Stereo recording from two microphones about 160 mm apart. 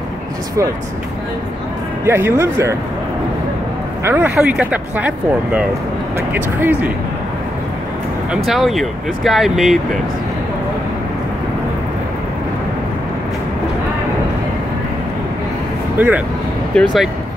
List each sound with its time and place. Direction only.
2.0 s speech: 15° right (ahead or behind)
4.0 s speech: 10° right (ahead or behind)
8.5 s speech: centre (ahead or behind)
16.0 s speech: 10° right (ahead or behind)